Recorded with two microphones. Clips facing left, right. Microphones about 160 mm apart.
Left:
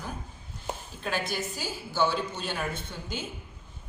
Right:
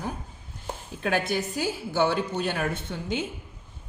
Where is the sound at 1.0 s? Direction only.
60° right (ahead or behind).